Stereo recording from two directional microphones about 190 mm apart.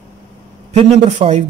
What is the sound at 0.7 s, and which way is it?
Speech, 35° right (ahead or behind).